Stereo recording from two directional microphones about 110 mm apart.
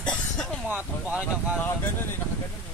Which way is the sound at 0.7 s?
15° right (ahead or behind).